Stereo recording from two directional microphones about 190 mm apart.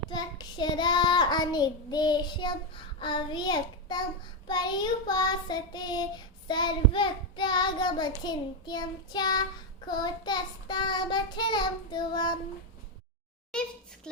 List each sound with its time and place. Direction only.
0.1 s child singing: 20° left (ahead or behind)
13.5 s a child's voice: 5° left (ahead or behind)